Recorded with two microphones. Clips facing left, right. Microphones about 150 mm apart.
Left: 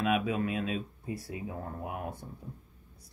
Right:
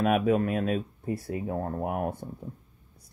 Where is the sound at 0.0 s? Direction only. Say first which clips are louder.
Right 6 dB; 45° right (ahead or behind).